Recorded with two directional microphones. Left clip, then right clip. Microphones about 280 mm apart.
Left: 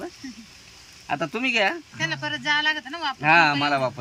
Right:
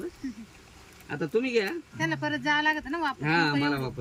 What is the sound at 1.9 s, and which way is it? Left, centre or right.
Speech, centre.